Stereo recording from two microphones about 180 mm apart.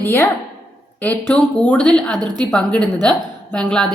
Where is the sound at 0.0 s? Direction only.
10° left (ahead or behind).